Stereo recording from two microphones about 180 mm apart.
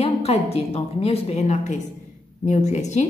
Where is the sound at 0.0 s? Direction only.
35° left (ahead or behind).